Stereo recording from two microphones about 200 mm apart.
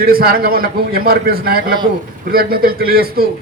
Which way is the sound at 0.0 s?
50° right (ahead or behind).